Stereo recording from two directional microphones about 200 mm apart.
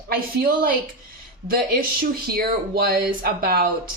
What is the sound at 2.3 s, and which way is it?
Speech, 50° right (ahead or behind).